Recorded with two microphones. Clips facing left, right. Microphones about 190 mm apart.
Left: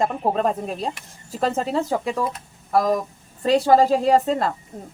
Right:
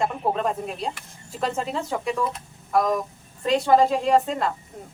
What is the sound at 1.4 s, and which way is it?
A woman's voice, 40° left (ahead or behind).